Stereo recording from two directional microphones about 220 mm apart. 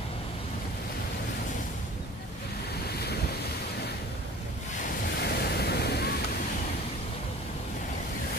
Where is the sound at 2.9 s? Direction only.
45° left (ahead or behind).